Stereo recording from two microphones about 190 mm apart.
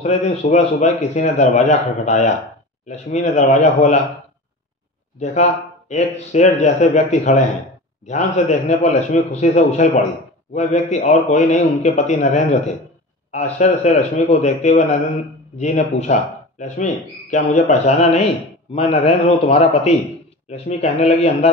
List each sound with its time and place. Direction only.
0.0 s a man's voice: 35° left (ahead or behind)
5.2 s a man's voice: 40° left (ahead or behind)